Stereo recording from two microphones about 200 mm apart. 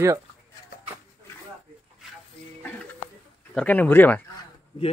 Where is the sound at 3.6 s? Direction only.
5° left (ahead or behind).